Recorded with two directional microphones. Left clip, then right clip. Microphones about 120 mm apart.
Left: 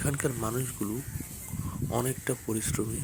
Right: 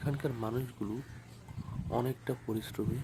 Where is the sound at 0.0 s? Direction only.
25° left (ahead or behind).